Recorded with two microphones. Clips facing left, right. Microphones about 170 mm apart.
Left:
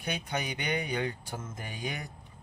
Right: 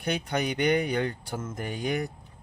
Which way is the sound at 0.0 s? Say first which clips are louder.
Right 6 dB; 55° right (ahead or behind).